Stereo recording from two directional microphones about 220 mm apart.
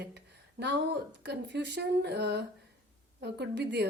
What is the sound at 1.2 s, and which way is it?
A woman's voice, 50° right (ahead or behind).